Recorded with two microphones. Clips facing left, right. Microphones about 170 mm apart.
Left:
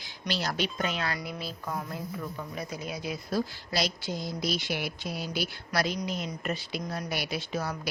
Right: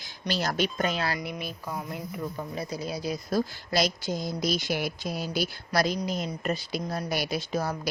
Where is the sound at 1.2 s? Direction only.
20° right (ahead or behind).